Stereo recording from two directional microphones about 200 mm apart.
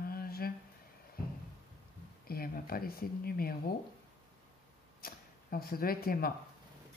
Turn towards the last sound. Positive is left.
turn(degrees=50)  # may be behind; listen again after turning